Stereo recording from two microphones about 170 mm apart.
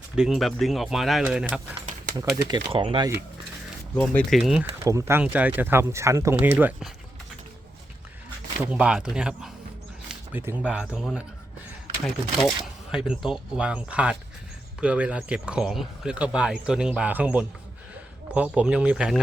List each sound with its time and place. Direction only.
0.2 s speech: centre (ahead or behind)
2.6 s speech: 30° right (ahead or behind)
3.9 s speech: 10° left (ahead or behind)
4.8 s speech: 20° right (ahead or behind)
8.5 s speech: 5° right (ahead or behind)